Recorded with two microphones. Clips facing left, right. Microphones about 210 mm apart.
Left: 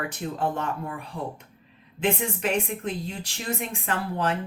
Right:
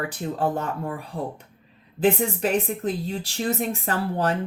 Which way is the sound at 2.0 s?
35° right (ahead or behind).